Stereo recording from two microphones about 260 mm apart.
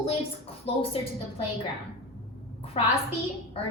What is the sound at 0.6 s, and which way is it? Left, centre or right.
Speech, left.